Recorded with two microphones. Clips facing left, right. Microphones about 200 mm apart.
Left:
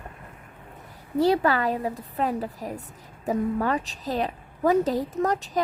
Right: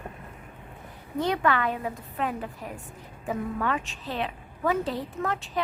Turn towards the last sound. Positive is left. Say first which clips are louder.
# left 5 dB
turn(degrees=40)  # may be behind; listen again after turning